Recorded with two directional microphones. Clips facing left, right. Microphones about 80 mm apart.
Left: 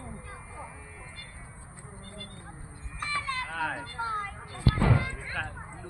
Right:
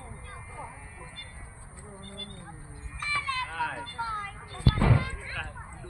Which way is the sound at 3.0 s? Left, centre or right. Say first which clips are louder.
Right 1 dB; left.